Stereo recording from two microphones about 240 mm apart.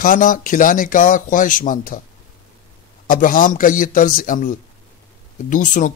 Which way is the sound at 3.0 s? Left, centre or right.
Left.